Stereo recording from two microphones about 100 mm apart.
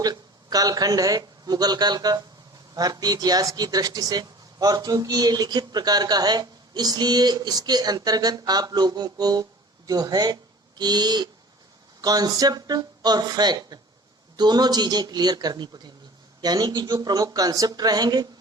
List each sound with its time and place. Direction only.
0.0 s a man's voice: 40° right (ahead or behind)